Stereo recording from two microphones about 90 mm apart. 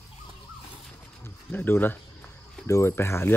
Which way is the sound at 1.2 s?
25° left (ahead or behind).